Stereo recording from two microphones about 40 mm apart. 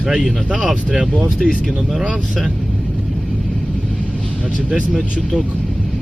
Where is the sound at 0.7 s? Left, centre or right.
Right.